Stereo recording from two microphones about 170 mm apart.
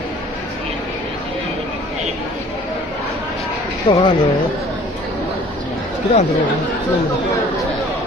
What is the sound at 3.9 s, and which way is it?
Speech, 30° left (ahead or behind).